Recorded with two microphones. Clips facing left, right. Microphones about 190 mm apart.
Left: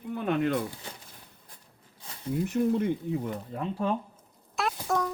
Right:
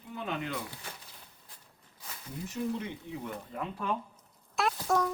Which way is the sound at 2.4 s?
55° left (ahead or behind).